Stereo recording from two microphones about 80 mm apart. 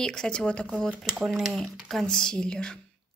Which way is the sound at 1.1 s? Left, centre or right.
Centre.